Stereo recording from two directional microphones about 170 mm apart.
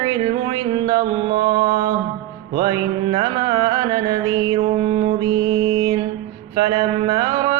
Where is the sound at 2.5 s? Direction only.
25° right (ahead or behind).